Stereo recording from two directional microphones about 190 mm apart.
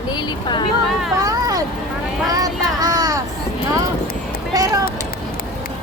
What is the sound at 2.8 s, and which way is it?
Vehicle, 20° right (ahead or behind).